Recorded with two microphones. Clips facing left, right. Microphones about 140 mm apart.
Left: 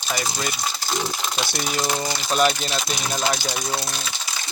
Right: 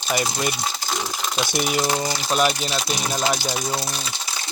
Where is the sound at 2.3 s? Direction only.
5° right (ahead or behind).